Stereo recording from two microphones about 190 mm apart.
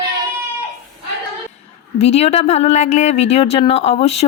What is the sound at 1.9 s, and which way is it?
Speech, 35° left (ahead or behind).